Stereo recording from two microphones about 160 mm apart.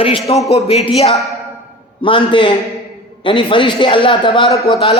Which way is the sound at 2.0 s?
30° left (ahead or behind).